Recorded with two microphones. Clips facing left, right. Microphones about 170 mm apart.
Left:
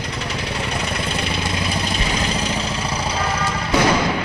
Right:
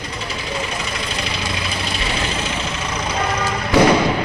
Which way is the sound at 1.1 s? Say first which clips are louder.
Left 2 dB; 55° left (ahead or behind).